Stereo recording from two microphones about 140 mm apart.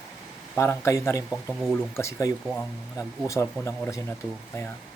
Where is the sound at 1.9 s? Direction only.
20° left (ahead or behind).